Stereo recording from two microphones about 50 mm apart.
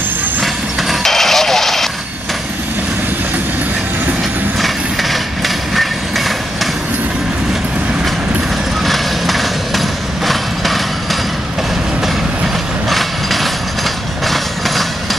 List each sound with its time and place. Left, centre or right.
0.4 s vehicle: centre
5.8 s train: centre
8.8 s vehicle: centre
12.9 s a sound: centre
14.2 s train: centre